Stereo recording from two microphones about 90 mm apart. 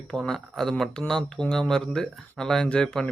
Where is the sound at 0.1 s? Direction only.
5° left (ahead or behind).